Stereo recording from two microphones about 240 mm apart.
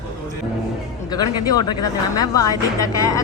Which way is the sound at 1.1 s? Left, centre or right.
Centre.